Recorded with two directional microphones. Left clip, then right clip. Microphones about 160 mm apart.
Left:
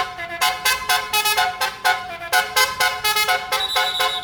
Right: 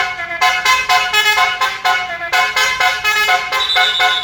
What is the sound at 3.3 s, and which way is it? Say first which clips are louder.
Vehicle horn: right 6 dB; 30° left (ahead or behind).